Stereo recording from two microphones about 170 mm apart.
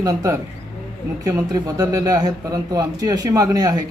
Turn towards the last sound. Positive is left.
turn(degrees=-20)  # may be behind; listen again after turning